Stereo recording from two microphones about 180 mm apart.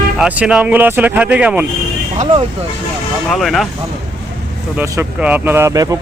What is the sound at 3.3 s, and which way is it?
Speech, centre (ahead or behind).